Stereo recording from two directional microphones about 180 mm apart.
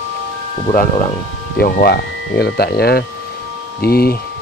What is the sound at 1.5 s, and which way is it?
Speech, 60° left (ahead or behind).